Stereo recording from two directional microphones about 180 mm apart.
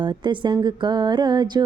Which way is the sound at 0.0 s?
25° right (ahead or behind).